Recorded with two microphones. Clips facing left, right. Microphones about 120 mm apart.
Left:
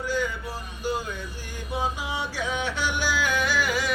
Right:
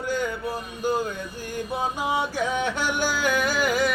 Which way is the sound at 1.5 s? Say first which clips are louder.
Right 2 dB; 50° right (ahead or behind).